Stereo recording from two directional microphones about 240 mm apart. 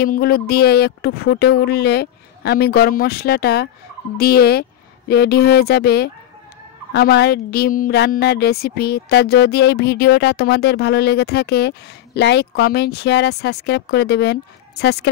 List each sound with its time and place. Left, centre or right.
0.0 s speech: left